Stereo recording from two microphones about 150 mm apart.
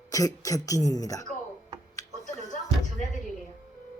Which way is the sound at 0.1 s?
20° left (ahead or behind).